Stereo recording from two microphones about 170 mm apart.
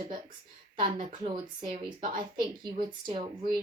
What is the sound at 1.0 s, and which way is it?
Speech, 45° right (ahead or behind).